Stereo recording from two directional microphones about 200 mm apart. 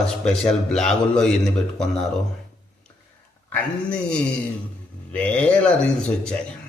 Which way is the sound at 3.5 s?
5° left (ahead or behind).